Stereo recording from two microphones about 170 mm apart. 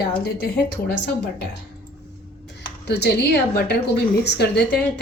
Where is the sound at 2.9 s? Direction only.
80° left.